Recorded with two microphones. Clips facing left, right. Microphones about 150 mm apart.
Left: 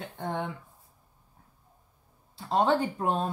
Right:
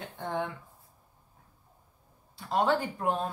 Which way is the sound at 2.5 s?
25° left (ahead or behind).